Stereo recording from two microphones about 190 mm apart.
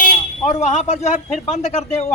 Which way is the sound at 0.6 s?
35° left (ahead or behind).